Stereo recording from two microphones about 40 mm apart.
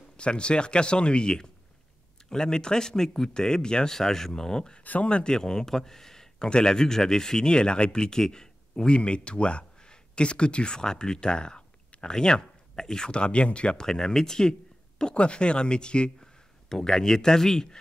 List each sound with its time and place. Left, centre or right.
0.2 s speech: left
13.8 s speech: centre